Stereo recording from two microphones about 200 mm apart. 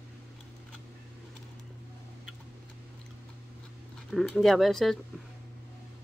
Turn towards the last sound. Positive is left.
turn(degrees=0)  # may be behind; listen again after turning